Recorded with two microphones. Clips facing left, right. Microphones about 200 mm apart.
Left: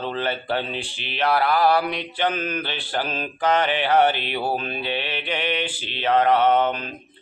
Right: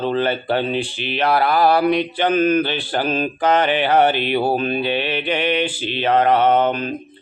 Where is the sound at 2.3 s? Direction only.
70° right (ahead or behind).